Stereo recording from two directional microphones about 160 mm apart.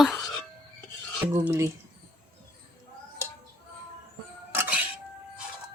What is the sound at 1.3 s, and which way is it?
Speech, 15° right (ahead or behind).